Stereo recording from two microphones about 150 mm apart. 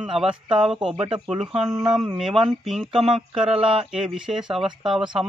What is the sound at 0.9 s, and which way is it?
Speech, 35° right (ahead or behind).